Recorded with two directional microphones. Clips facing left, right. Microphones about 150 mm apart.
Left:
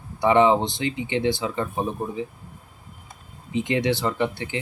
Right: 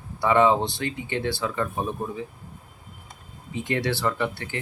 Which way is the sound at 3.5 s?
20° left (ahead or behind).